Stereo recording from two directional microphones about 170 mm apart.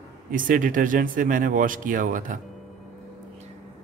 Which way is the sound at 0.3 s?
50° right (ahead or behind).